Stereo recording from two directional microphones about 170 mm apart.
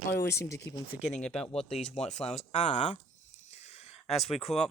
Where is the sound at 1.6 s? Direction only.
40° left (ahead or behind).